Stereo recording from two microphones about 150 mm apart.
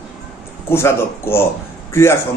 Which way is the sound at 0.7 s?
15° left (ahead or behind).